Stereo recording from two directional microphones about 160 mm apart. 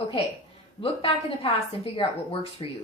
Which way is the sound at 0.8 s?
35° left (ahead or behind).